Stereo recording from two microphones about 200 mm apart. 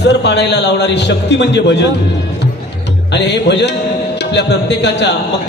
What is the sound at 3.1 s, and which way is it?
A man's voice, 60° left (ahead or behind).